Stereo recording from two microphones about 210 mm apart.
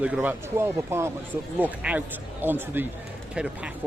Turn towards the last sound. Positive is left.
turn(degrees=-5)  # may be behind; listen again after turning